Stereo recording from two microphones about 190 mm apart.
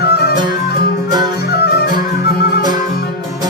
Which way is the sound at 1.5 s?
60° left (ahead or behind).